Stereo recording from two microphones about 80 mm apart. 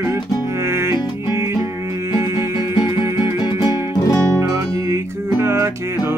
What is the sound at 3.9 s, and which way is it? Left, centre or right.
Music, left.